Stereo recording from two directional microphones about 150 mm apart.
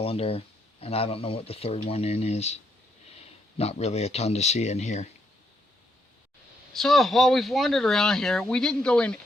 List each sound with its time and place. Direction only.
0.0 s speech: 40° left (ahead or behind)
6.7 s speech: centre (ahead or behind)